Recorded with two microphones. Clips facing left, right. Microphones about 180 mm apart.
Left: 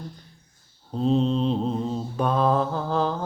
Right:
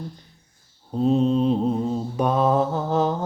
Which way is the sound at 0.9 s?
10° right (ahead or behind).